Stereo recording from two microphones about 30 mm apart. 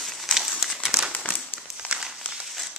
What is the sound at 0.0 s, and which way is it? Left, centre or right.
Crumpling, centre.